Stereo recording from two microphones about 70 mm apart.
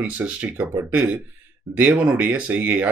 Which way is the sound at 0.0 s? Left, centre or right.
Right.